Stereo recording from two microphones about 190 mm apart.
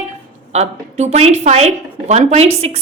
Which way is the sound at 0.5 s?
35° right (ahead or behind).